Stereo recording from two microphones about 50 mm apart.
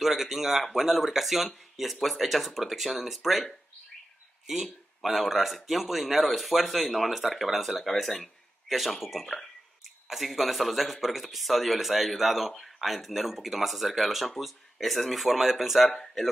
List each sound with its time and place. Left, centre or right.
0.0 s speech: centre
4.5 s speech: centre